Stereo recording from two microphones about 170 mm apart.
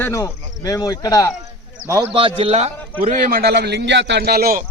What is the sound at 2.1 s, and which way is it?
Speech, 30° right (ahead or behind).